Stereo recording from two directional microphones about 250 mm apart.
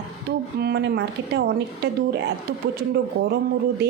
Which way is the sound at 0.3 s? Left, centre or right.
Right.